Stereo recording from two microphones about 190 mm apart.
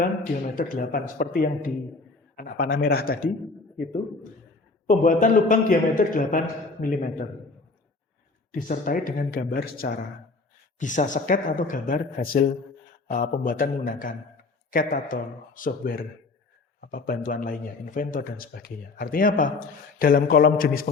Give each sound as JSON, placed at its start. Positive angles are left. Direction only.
{"t": 0.0, "sound": "speech", "side_deg": 45}
{"t": 4.9, "sound": "speech", "side_deg": 45}
{"t": 8.5, "sound": "speech", "side_deg": 45}